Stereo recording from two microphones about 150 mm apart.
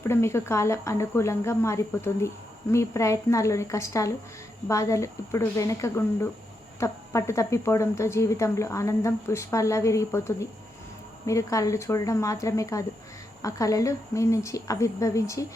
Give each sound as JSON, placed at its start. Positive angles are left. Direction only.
{"t": 0.0, "sound": "a woman's voice", "side_deg": 15}